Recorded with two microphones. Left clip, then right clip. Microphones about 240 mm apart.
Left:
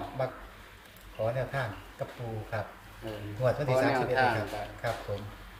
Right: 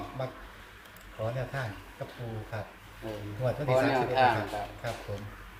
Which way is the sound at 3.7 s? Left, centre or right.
Centre.